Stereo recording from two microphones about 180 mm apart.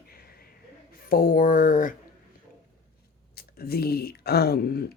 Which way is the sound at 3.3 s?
60° left (ahead or behind).